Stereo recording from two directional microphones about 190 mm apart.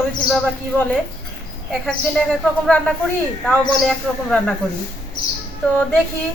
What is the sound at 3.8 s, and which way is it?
Speech, 5° left (ahead or behind).